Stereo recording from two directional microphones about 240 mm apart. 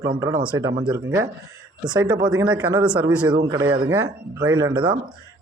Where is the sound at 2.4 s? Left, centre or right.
Centre.